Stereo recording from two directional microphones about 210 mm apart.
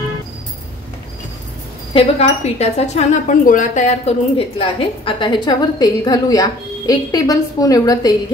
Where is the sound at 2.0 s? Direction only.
30° left (ahead or behind).